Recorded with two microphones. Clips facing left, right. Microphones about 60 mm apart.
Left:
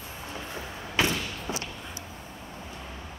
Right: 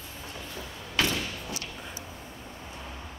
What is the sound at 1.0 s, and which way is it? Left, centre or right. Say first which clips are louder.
Thump: left 2 dB; left.